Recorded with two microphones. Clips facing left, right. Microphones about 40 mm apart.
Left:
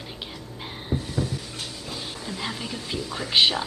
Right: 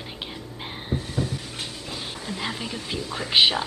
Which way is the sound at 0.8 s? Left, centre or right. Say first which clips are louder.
Even; centre.